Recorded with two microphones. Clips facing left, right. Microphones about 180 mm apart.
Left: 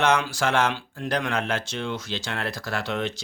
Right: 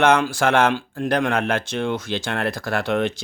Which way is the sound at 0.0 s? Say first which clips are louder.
Right 5 dB; 55° right (ahead or behind).